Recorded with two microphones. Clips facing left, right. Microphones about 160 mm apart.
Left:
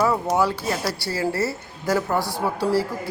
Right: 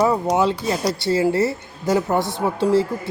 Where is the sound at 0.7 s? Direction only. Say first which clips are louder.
Right 5 dB; 20° right (ahead or behind).